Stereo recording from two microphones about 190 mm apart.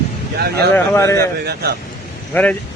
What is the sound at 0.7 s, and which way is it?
Speech, 15° left (ahead or behind).